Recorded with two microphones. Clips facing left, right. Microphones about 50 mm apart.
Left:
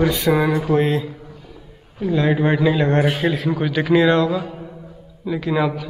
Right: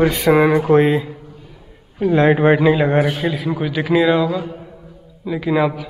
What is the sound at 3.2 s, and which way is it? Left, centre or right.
A man's voice, centre.